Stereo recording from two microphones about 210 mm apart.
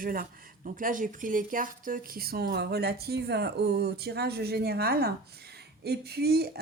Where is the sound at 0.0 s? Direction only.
40° right (ahead or behind).